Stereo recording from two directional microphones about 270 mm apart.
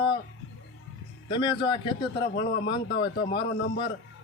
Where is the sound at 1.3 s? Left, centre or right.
Centre.